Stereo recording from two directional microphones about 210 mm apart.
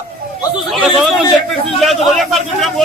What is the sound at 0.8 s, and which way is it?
A man's voice, centre (ahead or behind).